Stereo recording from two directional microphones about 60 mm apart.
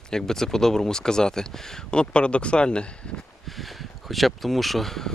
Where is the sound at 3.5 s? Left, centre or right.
Centre.